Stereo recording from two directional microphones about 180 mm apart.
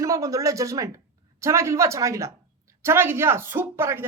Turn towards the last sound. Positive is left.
turn(degrees=-15)  # may be behind; listen again after turning